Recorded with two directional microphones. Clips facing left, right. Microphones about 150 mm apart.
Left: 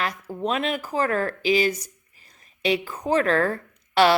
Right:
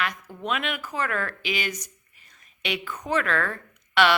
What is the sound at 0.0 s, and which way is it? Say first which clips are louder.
A woman's voice: left 4 dB; 35° left (ahead or behind).